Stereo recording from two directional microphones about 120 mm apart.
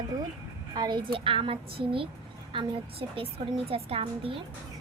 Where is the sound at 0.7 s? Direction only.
35° right (ahead or behind).